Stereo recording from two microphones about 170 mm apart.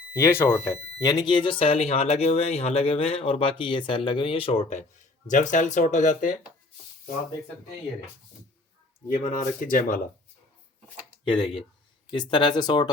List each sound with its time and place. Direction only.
0.1 s speech: 15° left (ahead or behind)
1.0 s speech: 25° left (ahead or behind); by 6.3 s 50° left (ahead or behind)
9.3 s speech: 50° left (ahead or behind)
11.3 s speech: 30° left (ahead or behind)